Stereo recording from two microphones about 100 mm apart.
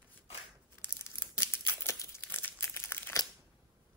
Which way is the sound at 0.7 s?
20° left (ahead or behind).